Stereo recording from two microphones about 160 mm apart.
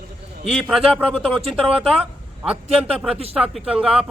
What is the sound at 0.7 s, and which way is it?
Speech, 5° right (ahead or behind).